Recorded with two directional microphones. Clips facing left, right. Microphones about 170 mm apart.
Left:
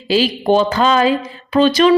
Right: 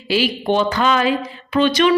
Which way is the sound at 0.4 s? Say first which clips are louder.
Left 4 dB; 35° left (ahead or behind).